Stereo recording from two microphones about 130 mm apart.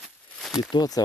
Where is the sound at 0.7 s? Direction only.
30° left (ahead or behind).